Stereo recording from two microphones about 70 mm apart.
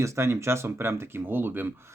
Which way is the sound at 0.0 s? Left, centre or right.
Right.